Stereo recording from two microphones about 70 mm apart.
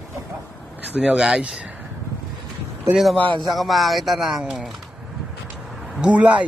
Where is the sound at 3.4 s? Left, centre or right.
Centre.